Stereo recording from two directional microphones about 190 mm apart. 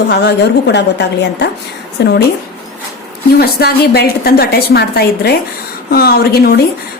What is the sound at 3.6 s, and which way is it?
A woman's voice, 55° left (ahead or behind).